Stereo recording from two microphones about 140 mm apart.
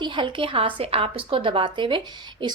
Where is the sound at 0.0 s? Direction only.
35° right (ahead or behind).